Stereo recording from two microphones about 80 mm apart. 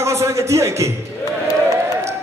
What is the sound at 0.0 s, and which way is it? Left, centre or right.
Speech, right.